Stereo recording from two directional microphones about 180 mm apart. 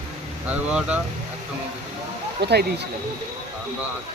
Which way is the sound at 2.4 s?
65° right (ahead or behind).